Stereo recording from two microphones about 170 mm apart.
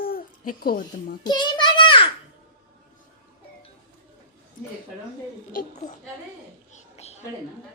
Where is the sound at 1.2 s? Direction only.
25° left (ahead or behind).